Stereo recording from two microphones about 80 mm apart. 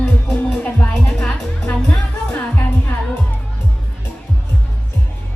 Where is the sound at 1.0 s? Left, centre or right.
Centre.